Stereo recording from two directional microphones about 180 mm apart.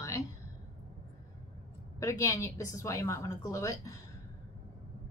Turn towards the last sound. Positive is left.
turn(degrees=15)  # may be behind; listen again after turning